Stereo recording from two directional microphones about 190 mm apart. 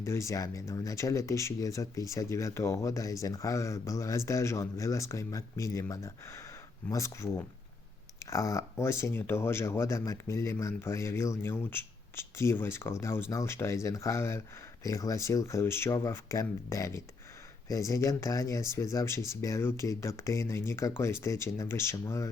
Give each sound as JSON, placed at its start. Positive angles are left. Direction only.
{"t": 0.0, "sound": "speech", "side_deg": 15}